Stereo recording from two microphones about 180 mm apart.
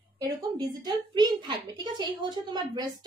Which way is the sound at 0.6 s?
25° right (ahead or behind).